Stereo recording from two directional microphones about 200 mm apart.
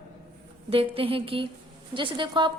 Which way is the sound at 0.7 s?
30° right (ahead or behind).